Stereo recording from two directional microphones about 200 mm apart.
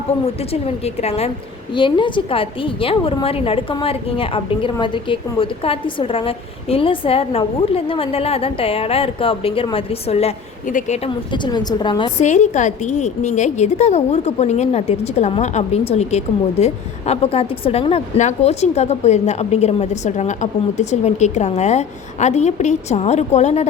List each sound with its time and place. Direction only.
0.3 s a woman's voice: 30° left (ahead or behind)
12.1 s a woman's voice: 35° left (ahead or behind)